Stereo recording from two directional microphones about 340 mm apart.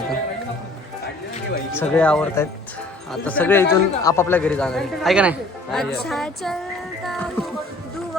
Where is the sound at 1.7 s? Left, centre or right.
Centre.